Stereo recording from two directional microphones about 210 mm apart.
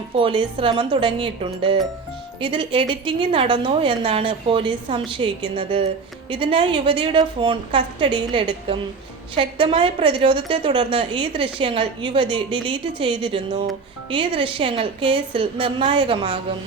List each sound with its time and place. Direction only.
0.2 s a woman's voice: 25° right (ahead or behind)